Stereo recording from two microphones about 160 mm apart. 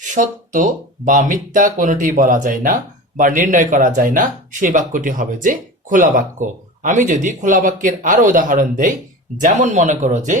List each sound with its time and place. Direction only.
0.0 s speech: 50° right (ahead or behind)